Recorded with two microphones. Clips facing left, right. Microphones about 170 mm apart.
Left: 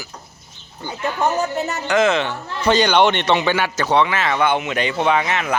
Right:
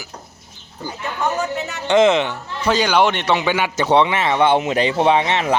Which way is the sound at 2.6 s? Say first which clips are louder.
Left 1 dB; 5° right (ahead or behind).